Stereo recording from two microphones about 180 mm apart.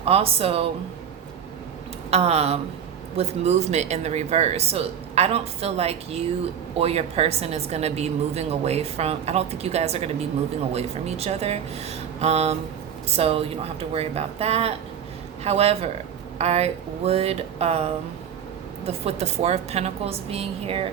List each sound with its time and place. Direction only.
0.0 s a woman's voice: 35° right (ahead or behind)
2.0 s a woman's voice: 35° right (ahead or behind)
18.9 s a woman's voice: 35° right (ahead or behind)